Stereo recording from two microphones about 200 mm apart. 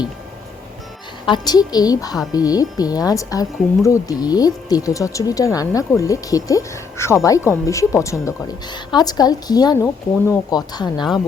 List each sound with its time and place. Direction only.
1.3 s speech: 20° left (ahead or behind)